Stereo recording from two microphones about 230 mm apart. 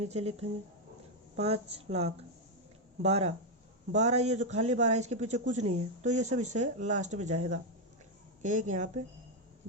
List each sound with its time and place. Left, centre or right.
0.0 s a man's voice: right